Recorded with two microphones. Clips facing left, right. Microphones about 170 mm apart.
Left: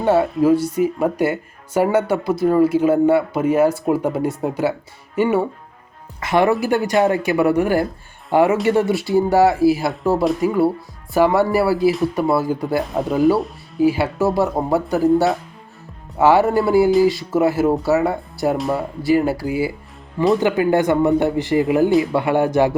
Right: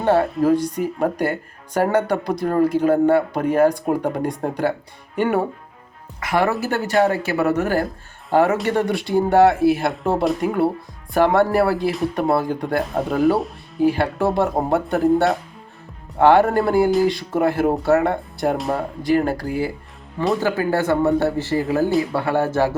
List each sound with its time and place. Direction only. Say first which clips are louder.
0.0 s speech: left 2 dB; 5° left (ahead or behind)
6.1 s speech: left 3 dB; 25° left (ahead or behind)